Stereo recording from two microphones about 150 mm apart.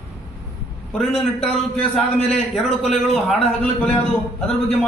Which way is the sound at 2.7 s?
45° left (ahead or behind).